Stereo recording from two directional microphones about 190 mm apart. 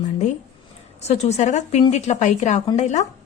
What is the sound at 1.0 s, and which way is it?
Speech, 35° left (ahead or behind).